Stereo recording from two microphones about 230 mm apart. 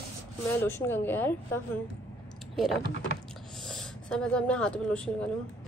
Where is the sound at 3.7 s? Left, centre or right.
Centre.